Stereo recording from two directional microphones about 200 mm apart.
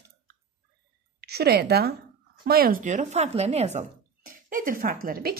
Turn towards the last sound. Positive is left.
turn(degrees=-45)  # may be behind; listen again after turning